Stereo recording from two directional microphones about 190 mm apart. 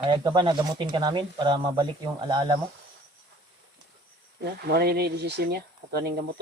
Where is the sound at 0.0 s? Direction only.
25° right (ahead or behind).